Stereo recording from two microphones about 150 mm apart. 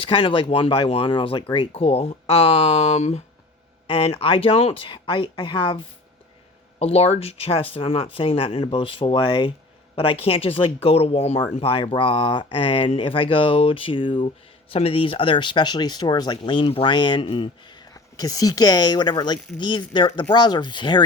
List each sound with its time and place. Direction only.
0.0 s speech: 35° left (ahead or behind)